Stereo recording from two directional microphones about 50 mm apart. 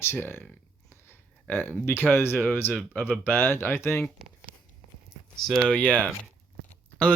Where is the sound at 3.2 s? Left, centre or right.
Left.